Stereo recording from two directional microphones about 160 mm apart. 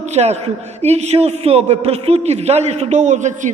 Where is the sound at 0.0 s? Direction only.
45° right (ahead or behind).